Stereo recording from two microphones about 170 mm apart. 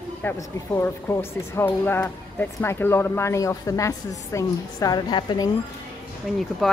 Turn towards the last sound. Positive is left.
turn(degrees=0)  # may be behind; listen again after turning